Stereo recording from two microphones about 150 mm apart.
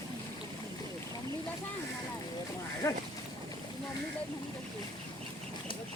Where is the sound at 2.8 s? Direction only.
25° left (ahead or behind).